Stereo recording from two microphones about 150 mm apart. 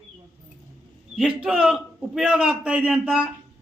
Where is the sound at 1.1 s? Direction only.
5° right (ahead or behind).